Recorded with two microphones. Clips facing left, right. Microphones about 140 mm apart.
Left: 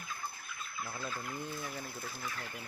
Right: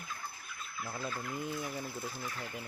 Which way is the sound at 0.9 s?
20° right (ahead or behind).